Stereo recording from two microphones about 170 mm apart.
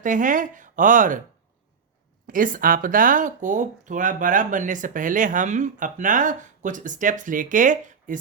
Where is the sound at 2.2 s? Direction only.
50° right (ahead or behind).